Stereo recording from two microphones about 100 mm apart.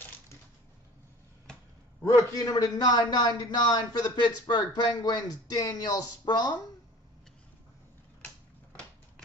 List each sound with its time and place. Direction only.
2.0 s a man's voice: 35° left (ahead or behind)